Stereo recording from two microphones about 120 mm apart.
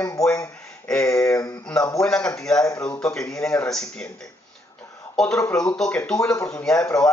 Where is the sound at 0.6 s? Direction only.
5° left (ahead or behind).